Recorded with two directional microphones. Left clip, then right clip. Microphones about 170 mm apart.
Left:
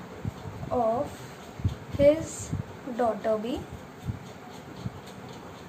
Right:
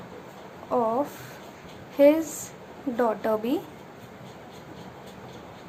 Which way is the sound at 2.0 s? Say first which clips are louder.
Right 3 dB; 35° right (ahead or behind).